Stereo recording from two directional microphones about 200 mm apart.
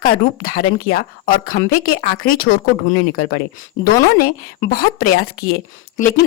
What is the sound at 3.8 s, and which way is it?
Speech, 50° left (ahead or behind).